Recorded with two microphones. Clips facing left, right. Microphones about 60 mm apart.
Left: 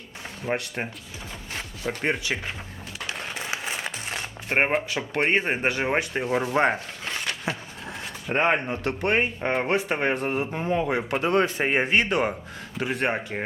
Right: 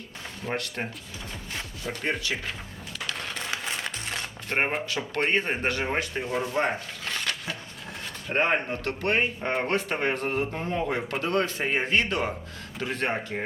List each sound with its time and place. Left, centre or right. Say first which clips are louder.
0.4 s speech: left 3 dB; centre
1.5 s music: left 4 dB; centre
3.1 s a sound: left 1 dB; centre
4.9 s speech: even; centre
6.5 s a sound: left 4 dB; left
8.7 s speech: left 2 dB; left